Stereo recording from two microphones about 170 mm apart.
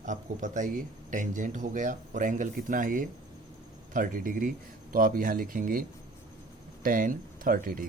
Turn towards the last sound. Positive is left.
turn(degrees=-55)  # may be behind; listen again after turning